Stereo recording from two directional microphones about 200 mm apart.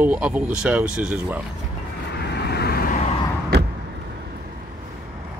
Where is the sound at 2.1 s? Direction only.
55° left (ahead or behind).